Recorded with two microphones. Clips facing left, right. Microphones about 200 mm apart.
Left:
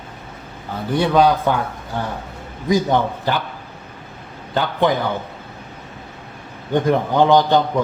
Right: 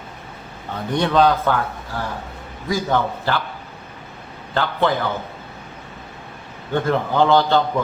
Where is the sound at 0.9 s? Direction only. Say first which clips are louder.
Left 1 dB; 10° left (ahead or behind).